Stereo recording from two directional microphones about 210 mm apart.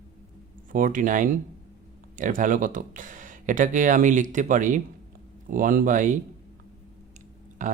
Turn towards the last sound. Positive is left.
turn(degrees=-40)  # may be behind; listen again after turning